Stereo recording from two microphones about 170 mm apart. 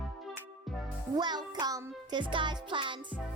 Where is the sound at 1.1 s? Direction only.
25° right (ahead or behind).